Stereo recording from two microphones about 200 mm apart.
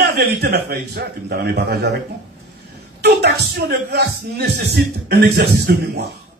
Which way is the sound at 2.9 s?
55° right (ahead or behind).